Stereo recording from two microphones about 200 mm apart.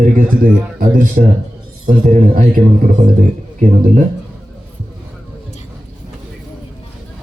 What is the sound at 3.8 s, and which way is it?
Speech, 40° right (ahead or behind).